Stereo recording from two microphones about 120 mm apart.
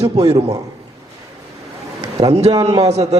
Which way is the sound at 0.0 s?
60° right (ahead or behind).